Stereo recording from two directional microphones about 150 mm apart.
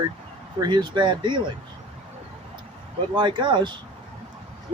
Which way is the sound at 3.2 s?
30° right (ahead or behind).